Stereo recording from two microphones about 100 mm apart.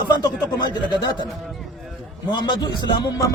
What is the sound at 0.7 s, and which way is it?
Speech, 45° left (ahead or behind).